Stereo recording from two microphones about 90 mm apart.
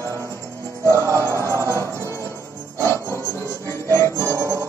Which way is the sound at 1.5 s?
35° right (ahead or behind).